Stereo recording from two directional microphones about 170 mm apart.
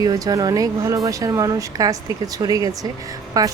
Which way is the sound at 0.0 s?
20° right (ahead or behind).